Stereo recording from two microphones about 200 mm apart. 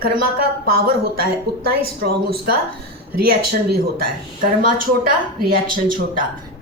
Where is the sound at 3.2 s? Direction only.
50° right (ahead or behind).